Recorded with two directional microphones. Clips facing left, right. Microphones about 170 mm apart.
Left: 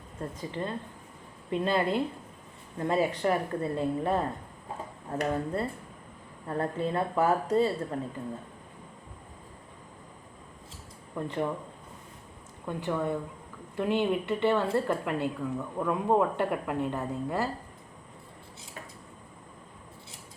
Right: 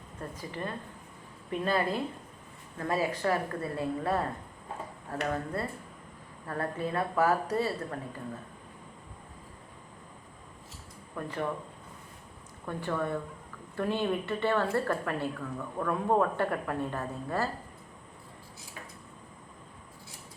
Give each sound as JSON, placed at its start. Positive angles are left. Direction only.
{"t": 0.2, "sound": "a woman's voice", "side_deg": 25}
{"t": 6.5, "sound": "a woman's voice", "side_deg": 25}
{"t": 11.1, "sound": "speech", "side_deg": 20}
{"t": 12.6, "sound": "speech", "side_deg": 20}